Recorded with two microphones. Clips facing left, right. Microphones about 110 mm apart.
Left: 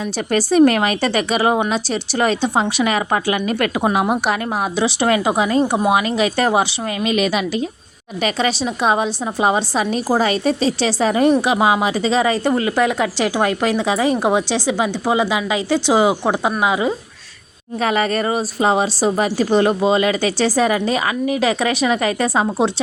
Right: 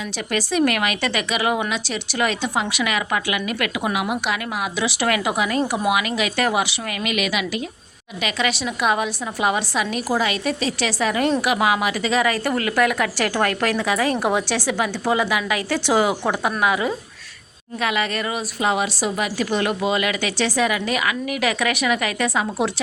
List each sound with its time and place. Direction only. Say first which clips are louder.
0.3 s speech: left 7 dB; 35° left (ahead or behind); by 16.9 s 20° left (ahead or behind)
17.7 s speech: left 5 dB; 35° left (ahead or behind)